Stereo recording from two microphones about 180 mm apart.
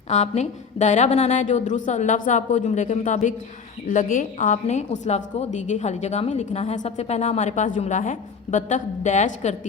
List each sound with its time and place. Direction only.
0.1 s a woman's voice: 35° left (ahead or behind)